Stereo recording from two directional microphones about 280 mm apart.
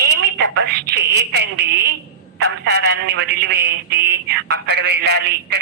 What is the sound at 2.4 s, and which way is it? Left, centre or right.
A man's voice, right.